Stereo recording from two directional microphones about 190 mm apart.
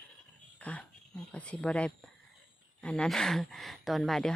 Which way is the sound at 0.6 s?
10° left (ahead or behind).